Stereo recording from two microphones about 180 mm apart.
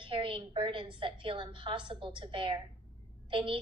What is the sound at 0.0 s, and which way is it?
A woman's voice, 30° right (ahead or behind).